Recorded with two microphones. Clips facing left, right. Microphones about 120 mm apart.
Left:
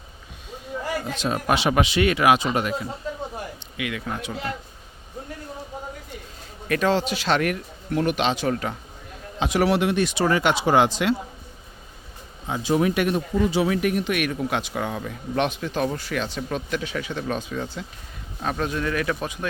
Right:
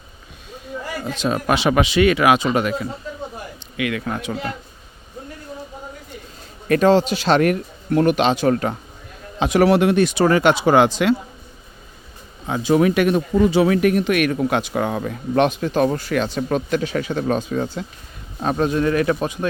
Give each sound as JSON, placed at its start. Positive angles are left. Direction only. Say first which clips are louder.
{"t": 1.1, "sound": "speech", "louder": "right 5 dB", "side_deg": -90}
{"t": 3.8, "sound": "speech", "louder": "right 6 dB", "side_deg": -65}
{"t": 6.7, "sound": "speech", "louder": "right 7 dB", "side_deg": -35}
{"t": 12.5, "sound": "speech", "louder": "right 5 dB", "side_deg": -80}
{"t": 18.4, "sound": "speech", "louder": "right 7 dB", "side_deg": -30}